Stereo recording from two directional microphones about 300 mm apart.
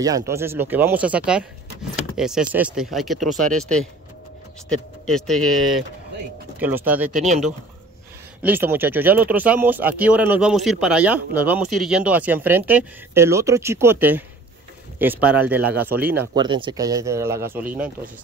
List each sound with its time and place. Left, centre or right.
0.0 s speech: centre
7.1 s speech: right
8.4 s speech: centre